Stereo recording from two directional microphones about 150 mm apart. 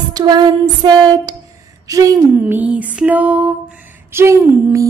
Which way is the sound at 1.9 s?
20° right (ahead or behind).